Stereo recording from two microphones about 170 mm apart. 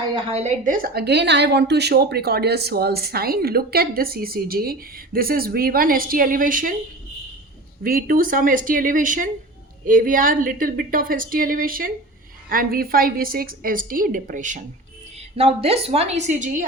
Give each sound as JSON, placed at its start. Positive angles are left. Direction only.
{"t": 0.3, "sound": "a woman's voice", "side_deg": -40}
{"t": 7.9, "sound": "a woman's voice", "side_deg": -60}
{"t": 15.4, "sound": "a woman's voice", "side_deg": -35}